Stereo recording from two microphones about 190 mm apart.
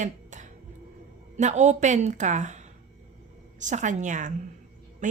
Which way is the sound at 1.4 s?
40° right (ahead or behind).